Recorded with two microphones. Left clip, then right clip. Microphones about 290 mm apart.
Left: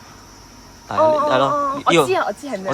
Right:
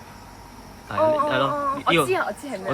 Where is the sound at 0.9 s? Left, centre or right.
Left.